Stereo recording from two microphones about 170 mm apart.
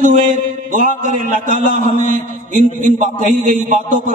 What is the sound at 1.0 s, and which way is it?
A man's voice, 50° right (ahead or behind).